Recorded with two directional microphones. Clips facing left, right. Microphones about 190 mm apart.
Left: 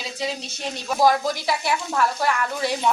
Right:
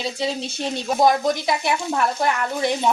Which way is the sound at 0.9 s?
20° right (ahead or behind).